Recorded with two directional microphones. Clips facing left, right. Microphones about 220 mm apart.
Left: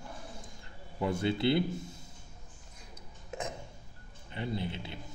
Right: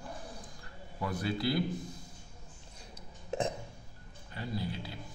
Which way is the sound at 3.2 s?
30° right (ahead or behind).